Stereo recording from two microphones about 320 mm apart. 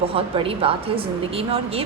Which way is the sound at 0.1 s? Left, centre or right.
Centre.